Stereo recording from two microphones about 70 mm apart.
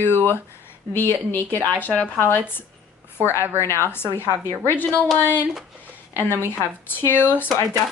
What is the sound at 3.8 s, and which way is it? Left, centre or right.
A woman's voice, left.